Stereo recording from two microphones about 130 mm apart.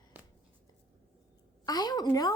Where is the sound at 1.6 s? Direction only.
30° left (ahead or behind).